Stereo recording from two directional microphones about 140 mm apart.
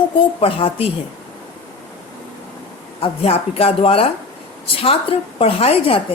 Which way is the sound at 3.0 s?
45° left (ahead or behind).